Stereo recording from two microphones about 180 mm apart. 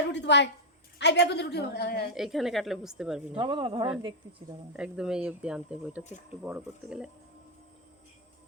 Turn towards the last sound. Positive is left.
turn(degrees=-5)  # may be behind; listen again after turning